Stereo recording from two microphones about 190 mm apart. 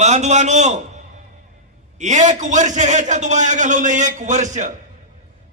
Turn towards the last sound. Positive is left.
turn(degrees=-40)  # may be behind; listen again after turning